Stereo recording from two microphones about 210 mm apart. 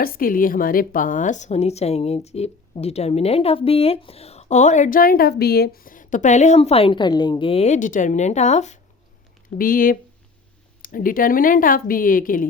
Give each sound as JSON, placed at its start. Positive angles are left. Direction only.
{"t": 0.0, "sound": "a woman's voice", "side_deg": 45}